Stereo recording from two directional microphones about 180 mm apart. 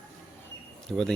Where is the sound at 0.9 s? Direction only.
5° left (ahead or behind).